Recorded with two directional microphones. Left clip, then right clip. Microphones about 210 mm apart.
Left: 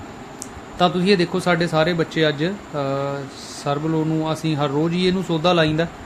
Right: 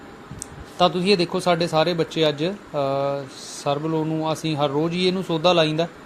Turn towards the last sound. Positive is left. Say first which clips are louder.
# even
turn(degrees=-10)  # may be behind; listen again after turning